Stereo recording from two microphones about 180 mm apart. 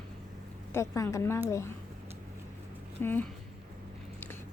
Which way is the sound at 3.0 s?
10° left (ahead or behind).